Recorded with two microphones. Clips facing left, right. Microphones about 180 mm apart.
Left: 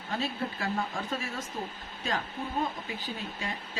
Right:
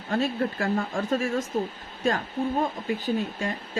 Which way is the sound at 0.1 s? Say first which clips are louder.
Right 7 dB; 50° right (ahead or behind).